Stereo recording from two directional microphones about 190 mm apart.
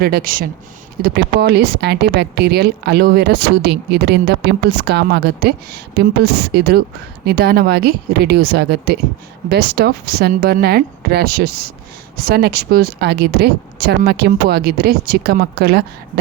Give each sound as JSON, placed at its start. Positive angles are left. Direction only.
{"t": 0.0, "sound": "speech", "side_deg": -50}